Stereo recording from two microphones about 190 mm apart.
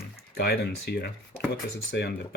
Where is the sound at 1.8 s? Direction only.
90° left.